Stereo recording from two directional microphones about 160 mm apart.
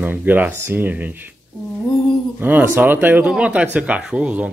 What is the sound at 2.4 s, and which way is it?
Speech, 10° right (ahead or behind).